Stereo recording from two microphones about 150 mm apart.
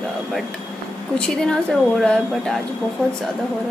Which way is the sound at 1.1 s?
5° left (ahead or behind).